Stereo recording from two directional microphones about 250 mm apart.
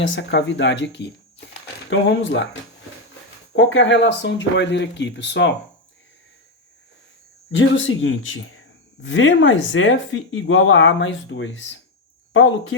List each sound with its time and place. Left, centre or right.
0.0 s speech: left
7.5 s speech: left